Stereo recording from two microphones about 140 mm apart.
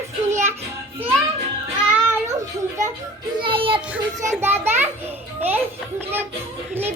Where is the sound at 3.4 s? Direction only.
40° right (ahead or behind).